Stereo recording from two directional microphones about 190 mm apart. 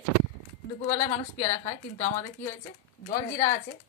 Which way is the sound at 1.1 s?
40° left (ahead or behind).